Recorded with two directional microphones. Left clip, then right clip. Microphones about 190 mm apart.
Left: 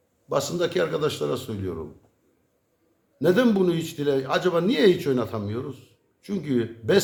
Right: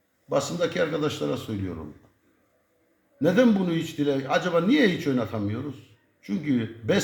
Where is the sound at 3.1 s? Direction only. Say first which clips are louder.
Left 1 dB; 25° left (ahead or behind).